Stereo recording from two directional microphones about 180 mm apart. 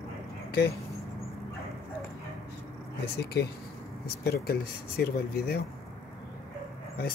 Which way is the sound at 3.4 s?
65° left (ahead or behind).